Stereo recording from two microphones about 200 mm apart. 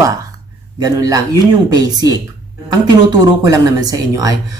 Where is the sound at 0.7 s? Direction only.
15° right (ahead or behind).